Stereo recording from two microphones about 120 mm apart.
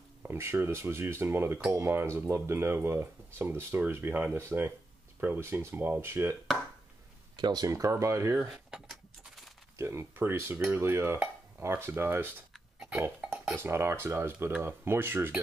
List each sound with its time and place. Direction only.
0.2 s speech: 20° right (ahead or behind)
7.3 s speech: 35° right (ahead or behind)
8.4 s speech: 5° right (ahead or behind)
9.8 s speech: 20° right (ahead or behind)
13.2 s cutlery: 5° right (ahead or behind)
13.6 s speech: 20° right (ahead or behind)